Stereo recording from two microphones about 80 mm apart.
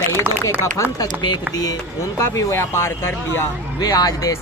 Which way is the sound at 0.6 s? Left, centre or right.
Left.